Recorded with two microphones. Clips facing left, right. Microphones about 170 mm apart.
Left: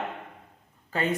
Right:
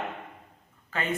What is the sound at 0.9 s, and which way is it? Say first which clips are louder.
Speech: left 3 dB; 35° left (ahead or behind).